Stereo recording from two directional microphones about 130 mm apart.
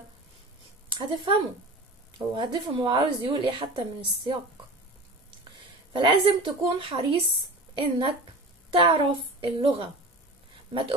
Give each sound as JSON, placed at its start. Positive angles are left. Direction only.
{"t": 0.9, "sound": "a woman's voice", "side_deg": -35}
{"t": 5.9, "sound": "a woman's voice", "side_deg": -35}